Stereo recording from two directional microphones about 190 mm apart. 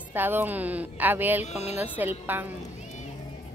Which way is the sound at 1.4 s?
35° left (ahead or behind).